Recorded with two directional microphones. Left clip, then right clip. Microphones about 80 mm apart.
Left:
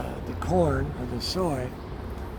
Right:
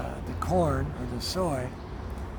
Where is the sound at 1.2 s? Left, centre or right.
Right.